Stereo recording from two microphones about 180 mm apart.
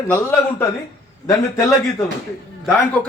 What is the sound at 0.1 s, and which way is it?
Speech, 10° left (ahead or behind).